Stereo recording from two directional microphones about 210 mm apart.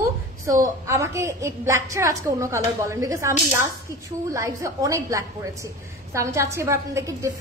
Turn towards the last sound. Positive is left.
turn(degrees=-15)  # may be behind; listen again after turning